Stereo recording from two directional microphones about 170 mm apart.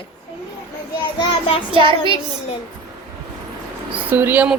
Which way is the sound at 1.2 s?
30° left (ahead or behind).